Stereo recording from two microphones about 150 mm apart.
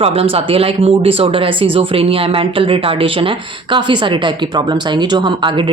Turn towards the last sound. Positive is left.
turn(degrees=-35)  # may be behind; listen again after turning